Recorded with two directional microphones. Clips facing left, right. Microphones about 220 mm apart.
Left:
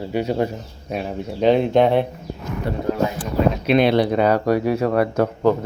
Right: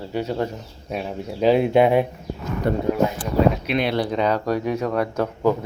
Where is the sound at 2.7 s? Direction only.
50° right (ahead or behind).